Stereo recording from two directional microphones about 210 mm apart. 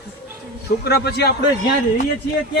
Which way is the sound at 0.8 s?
50° left (ahead or behind).